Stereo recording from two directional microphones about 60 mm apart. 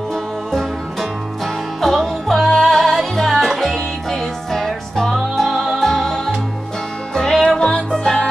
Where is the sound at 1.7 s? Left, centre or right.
Centre.